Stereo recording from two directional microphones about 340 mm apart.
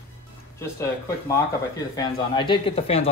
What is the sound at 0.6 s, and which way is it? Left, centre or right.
Speech, centre.